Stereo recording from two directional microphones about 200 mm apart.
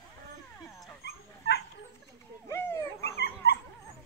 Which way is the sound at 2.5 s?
15° left (ahead or behind).